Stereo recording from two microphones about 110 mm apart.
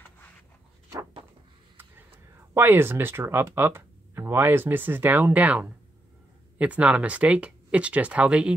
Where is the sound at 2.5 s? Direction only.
20° right (ahead or behind).